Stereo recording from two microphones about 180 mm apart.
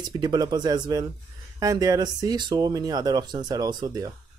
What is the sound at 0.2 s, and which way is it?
Speech, 25° right (ahead or behind).